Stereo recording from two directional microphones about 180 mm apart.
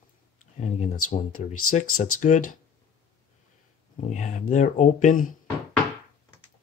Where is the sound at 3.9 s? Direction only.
40° left (ahead or behind).